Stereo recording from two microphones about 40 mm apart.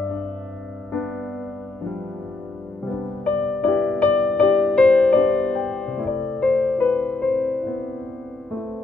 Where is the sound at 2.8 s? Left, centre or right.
Left.